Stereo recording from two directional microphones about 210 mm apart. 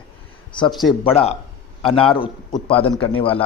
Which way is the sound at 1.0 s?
30° left (ahead or behind).